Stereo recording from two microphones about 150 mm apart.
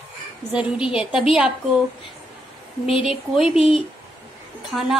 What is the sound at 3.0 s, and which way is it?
A woman's voice, 5° right (ahead or behind).